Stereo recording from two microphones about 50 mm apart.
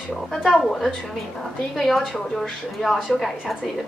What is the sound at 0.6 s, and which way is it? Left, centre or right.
A woman's voice, centre.